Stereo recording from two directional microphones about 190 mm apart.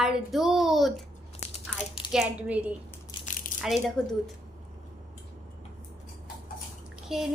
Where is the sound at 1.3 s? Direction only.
30° left (ahead or behind).